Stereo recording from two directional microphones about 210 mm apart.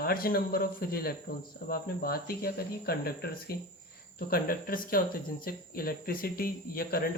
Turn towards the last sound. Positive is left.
turn(degrees=45)  # may be behind; listen again after turning